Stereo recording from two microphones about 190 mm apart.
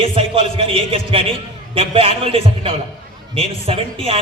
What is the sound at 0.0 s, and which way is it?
A man's voice, 25° right (ahead or behind).